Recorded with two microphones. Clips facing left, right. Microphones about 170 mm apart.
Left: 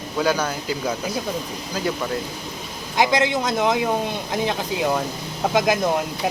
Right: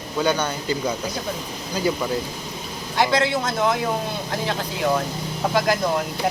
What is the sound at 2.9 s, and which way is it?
A man's voice, 15° left (ahead or behind).